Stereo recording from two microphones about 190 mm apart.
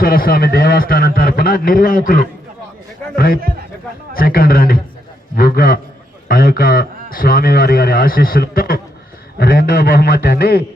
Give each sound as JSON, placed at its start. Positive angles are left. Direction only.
{"t": 0.0, "sound": "a man's voice", "side_deg": 50}
{"t": 4.1, "sound": "a man's voice", "side_deg": 50}